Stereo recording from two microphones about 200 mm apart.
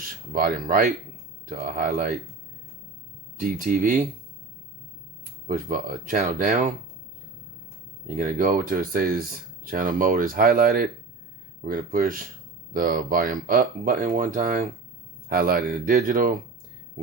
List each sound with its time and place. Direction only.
0.3 s speech: 45° right (ahead or behind)
3.6 s speech: 45° right (ahead or behind)
5.5 s speech: 45° right (ahead or behind)
8.1 s speech: 45° right (ahead or behind)